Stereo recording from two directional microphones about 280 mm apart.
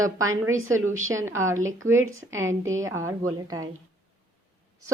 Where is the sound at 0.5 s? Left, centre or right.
Right.